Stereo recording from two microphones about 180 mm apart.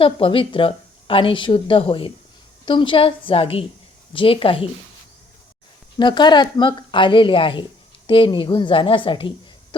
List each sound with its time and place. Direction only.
0.0 s a woman's voice: 30° left (ahead or behind)
6.0 s a woman's voice: 25° left (ahead or behind)